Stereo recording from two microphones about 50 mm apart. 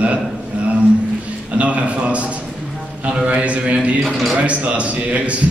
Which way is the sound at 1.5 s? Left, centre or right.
Right.